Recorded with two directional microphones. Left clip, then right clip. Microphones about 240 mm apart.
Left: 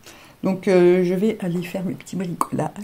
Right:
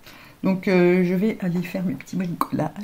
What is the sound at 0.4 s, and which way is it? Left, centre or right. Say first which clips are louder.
Speech: left 3 dB; left.